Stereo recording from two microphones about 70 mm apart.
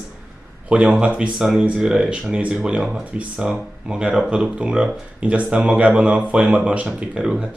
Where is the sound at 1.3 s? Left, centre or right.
Centre.